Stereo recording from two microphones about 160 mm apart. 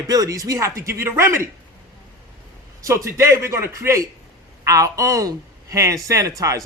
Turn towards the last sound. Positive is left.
turn(degrees=-20)  # may be behind; listen again after turning